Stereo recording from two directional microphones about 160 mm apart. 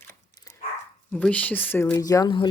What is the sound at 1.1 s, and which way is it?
Speech, 10° left (ahead or behind).